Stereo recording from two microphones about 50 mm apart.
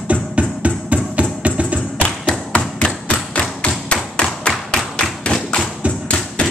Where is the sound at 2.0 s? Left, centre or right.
Centre.